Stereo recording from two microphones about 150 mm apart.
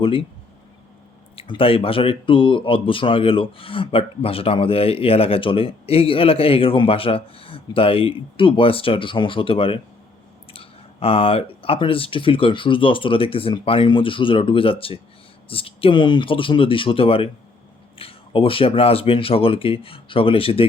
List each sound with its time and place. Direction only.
0.0 s speech: 35° left (ahead or behind)
1.4 s speech: 40° left (ahead or behind)